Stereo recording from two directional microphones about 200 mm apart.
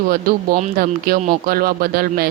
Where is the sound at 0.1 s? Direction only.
40° right (ahead or behind).